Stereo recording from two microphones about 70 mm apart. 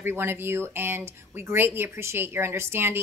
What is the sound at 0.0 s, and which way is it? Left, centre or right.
Speech, right.